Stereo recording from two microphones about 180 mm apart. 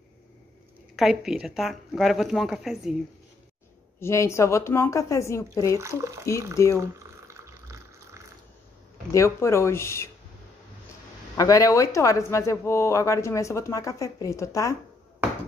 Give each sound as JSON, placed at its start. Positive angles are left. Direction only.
{"t": 0.9, "sound": "a woman's voice", "side_deg": 0}
{"t": 4.0, "sound": "speech", "side_deg": 15}
{"t": 5.8, "sound": "speech", "side_deg": -15}
{"t": 6.8, "sound": "water", "side_deg": -15}
{"t": 9.1, "sound": "speech", "side_deg": 15}
{"t": 11.3, "sound": "speech", "side_deg": 20}